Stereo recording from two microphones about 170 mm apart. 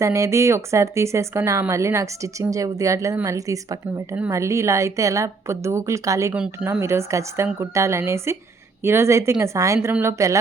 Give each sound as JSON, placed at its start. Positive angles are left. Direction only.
{"t": 0.0, "sound": "speech", "side_deg": -15}
{"t": 6.3, "sound": "speech", "side_deg": -5}
{"t": 6.7, "sound": "speech", "side_deg": -15}